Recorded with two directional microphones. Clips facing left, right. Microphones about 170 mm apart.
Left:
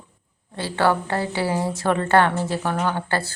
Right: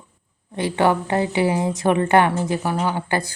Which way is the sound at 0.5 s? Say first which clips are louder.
Right 2 dB; 20° right (ahead or behind).